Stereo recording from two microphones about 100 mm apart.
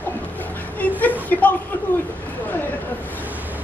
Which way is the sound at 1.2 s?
15° left (ahead or behind).